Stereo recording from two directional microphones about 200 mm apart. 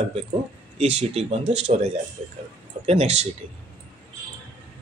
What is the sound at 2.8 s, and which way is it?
Speech, 30° right (ahead or behind).